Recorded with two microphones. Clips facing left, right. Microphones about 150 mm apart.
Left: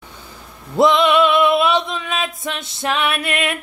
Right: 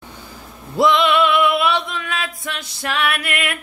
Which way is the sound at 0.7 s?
20° left (ahead or behind).